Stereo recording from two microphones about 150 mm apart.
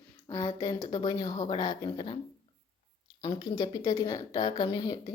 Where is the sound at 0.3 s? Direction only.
25° left (ahead or behind).